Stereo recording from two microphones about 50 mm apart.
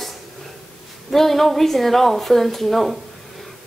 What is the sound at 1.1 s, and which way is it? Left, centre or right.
Speech, centre.